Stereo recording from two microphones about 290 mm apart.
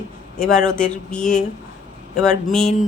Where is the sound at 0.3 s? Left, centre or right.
Centre.